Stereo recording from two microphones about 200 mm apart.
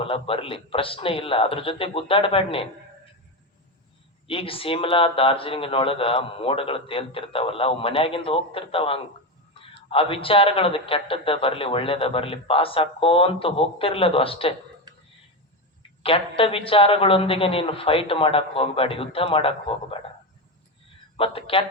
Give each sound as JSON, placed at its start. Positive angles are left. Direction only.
{"t": 0.0, "sound": "a man's voice", "side_deg": 25}
{"t": 4.3, "sound": "a man's voice", "side_deg": 25}
{"t": 14.9, "sound": "whispering", "side_deg": -20}
{"t": 16.0, "sound": "a man's voice", "side_deg": 25}
{"t": 21.2, "sound": "a man's voice", "side_deg": 25}